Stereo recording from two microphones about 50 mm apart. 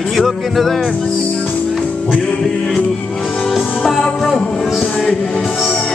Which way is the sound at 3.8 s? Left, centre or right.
Centre.